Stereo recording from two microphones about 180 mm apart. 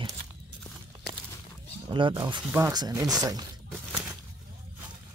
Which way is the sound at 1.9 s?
25° right (ahead or behind).